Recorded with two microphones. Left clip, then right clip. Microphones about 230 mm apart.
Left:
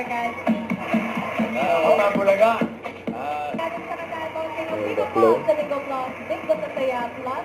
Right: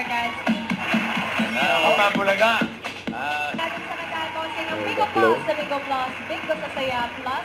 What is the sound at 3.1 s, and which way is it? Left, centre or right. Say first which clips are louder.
Music: right 1 dB; centre.